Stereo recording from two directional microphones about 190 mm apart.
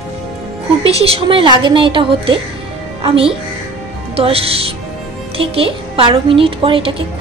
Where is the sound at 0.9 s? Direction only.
30° right (ahead or behind).